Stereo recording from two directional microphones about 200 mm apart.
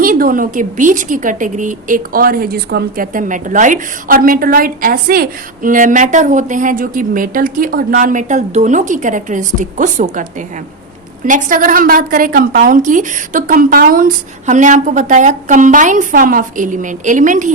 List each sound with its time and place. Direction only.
0.0 s a woman's voice: 45° right (ahead or behind)
11.3 s a woman's voice: 40° right (ahead or behind)